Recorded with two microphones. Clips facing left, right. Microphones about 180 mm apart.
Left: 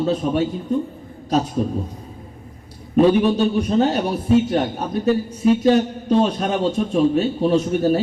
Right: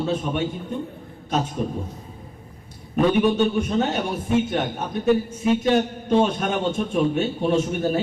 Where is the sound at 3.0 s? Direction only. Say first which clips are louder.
Left 4 dB; 35° left (ahead or behind).